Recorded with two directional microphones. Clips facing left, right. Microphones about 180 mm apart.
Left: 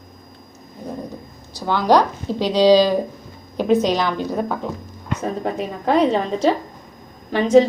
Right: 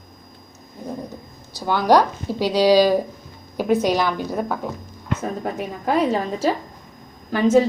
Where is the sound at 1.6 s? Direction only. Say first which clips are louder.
Even; 10° right (ahead or behind).